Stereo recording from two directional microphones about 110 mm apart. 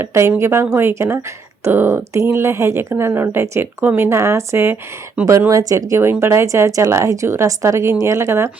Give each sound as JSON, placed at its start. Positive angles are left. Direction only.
{"t": 0.0, "sound": "a woman's voice", "side_deg": -25}
{"t": 5.5, "sound": "a woman's voice", "side_deg": -30}